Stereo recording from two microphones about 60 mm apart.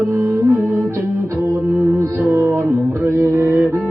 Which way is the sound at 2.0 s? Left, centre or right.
Right.